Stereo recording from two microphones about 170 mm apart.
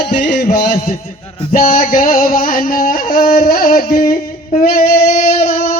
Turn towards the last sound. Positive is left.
turn(degrees=40)  # may be behind; listen again after turning